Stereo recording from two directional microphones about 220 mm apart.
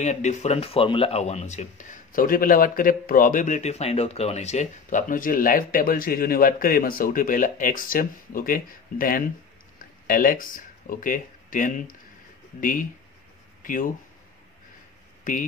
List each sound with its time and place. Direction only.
0.0 s speech: 30° left (ahead or behind)
15.3 s speech: 35° left (ahead or behind)